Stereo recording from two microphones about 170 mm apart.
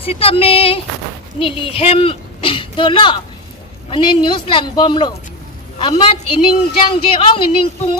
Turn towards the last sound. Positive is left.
turn(degrees=30)  # may be behind; listen again after turning